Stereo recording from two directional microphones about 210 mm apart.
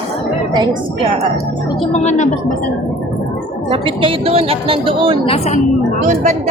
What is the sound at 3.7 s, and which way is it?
Speech, 25° right (ahead or behind).